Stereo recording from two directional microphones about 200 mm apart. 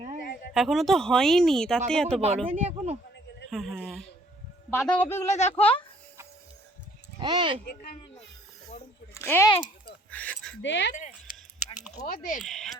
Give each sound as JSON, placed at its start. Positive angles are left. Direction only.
{"t": 0.5, "sound": "speech", "side_deg": 0}
{"t": 2.5, "sound": "speech", "side_deg": -30}
{"t": 3.5, "sound": "a man's voice", "side_deg": 0}
{"t": 5.3, "sound": "speech", "side_deg": 35}
{"t": 7.2, "sound": "speech", "side_deg": -20}
{"t": 7.6, "sound": "speech", "side_deg": 50}
{"t": 9.1, "sound": "speech", "side_deg": 15}
{"t": 10.1, "sound": "a sound", "side_deg": 5}
{"t": 10.6, "sound": "speech", "side_deg": 65}
{"t": 12.0, "sound": "speech", "side_deg": 40}
{"t": 12.4, "sound": "speech", "side_deg": 0}